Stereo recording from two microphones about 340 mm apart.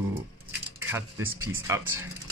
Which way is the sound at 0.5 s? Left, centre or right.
Centre.